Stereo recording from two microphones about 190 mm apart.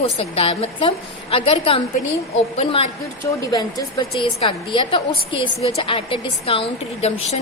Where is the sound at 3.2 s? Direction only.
15° left (ahead or behind); by 7.3 s 35° left (ahead or behind).